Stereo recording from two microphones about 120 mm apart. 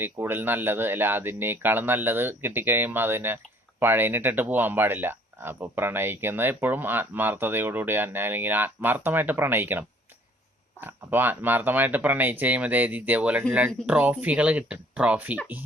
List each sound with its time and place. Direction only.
0.0 s speech: 20° right (ahead or behind)